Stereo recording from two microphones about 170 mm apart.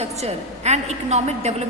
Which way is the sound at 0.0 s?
40° right (ahead or behind).